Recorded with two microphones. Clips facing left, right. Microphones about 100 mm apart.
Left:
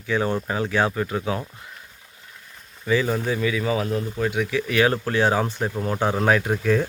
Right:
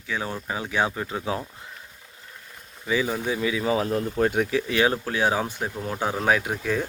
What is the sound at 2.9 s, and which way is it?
Speech, 10° right (ahead or behind).